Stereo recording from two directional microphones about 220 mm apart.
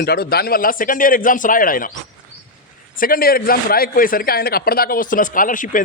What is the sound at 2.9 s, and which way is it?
A man's voice, 40° left (ahead or behind).